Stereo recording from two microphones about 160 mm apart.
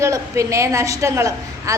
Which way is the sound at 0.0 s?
20° right (ahead or behind).